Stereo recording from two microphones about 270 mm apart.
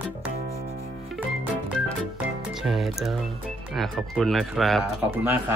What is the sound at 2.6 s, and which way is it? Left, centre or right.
Speech, centre.